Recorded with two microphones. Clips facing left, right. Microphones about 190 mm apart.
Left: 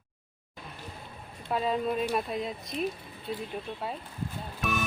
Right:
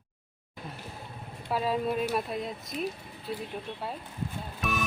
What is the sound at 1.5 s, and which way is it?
Speech, 5° right (ahead or behind).